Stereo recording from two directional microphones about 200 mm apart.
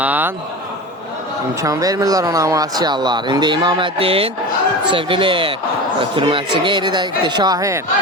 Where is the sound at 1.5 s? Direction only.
15° right (ahead or behind).